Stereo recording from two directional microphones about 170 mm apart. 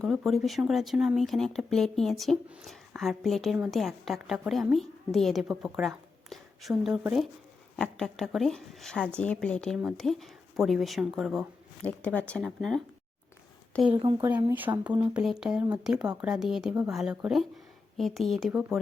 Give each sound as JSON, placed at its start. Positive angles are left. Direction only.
{"t": 0.0, "sound": "a woman's voice", "side_deg": 0}
{"t": 13.8, "sound": "speech", "side_deg": -30}
{"t": 14.9, "sound": "speech", "side_deg": -15}